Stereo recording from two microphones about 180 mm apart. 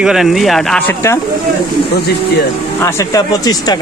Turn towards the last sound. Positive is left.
turn(degrees=20)  # may be behind; listen again after turning